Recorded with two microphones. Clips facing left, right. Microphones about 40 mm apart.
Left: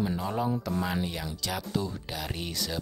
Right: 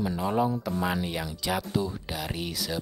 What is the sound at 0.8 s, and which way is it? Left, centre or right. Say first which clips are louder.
Speech: right 2 dB; centre.